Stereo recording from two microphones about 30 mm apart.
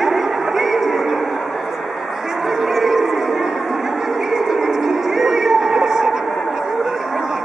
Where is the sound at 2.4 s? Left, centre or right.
Centre.